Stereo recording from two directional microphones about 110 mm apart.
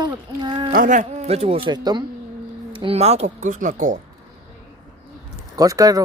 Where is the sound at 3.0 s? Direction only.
75° right (ahead or behind).